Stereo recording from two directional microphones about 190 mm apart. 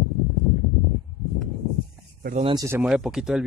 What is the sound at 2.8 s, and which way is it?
Speech, 5° right (ahead or behind).